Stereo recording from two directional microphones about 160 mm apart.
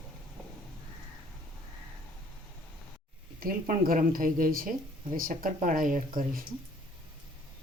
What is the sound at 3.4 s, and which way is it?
Speech, 60° right (ahead or behind).